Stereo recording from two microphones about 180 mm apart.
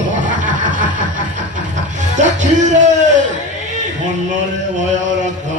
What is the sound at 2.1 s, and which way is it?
Music, 40° right (ahead or behind).